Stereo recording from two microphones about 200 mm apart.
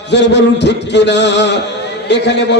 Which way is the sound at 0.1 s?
60° left (ahead or behind).